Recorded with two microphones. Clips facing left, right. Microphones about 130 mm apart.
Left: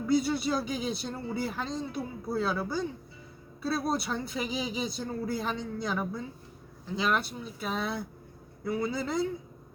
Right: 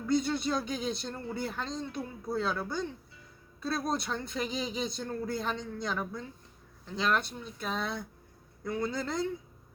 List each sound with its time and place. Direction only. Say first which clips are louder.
0.0 s speech: left 2 dB; 5° left (ahead or behind)